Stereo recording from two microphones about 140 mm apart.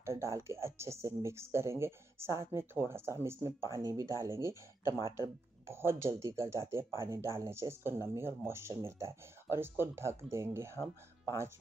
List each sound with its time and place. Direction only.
0.0 s speech: 20° right (ahead or behind)